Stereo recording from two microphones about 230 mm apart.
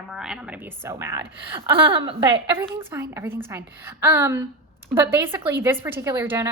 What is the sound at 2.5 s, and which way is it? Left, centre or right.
A woman's voice, centre.